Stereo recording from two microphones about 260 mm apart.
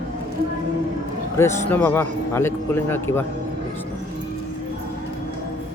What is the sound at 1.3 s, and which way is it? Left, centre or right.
Speech, centre.